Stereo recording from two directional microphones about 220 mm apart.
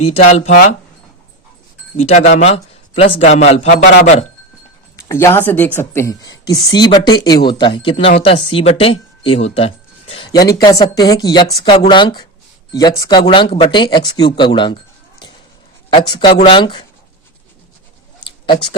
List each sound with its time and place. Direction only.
0.0 s speech: 30° left (ahead or behind)
2.0 s speech: 30° left (ahead or behind)
4.9 s speech: 10° left (ahead or behind)
15.9 s speech: 20° left (ahead or behind)
18.4 s speech: 20° left (ahead or behind)